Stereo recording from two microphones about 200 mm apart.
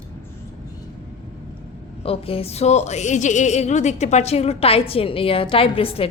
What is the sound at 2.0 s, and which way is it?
A woman's voice, 30° left (ahead or behind).